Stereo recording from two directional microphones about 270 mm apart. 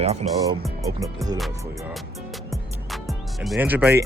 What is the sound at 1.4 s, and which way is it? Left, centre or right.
Music, centre.